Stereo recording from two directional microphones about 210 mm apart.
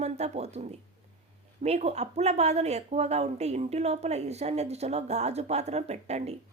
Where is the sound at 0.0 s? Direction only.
30° right (ahead or behind).